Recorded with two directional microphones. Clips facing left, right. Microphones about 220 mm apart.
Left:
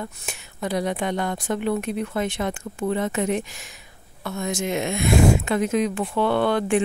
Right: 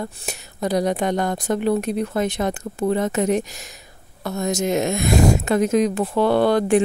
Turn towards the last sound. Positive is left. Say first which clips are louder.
# right 4 dB
turn(degrees=-40)  # may be behind; listen again after turning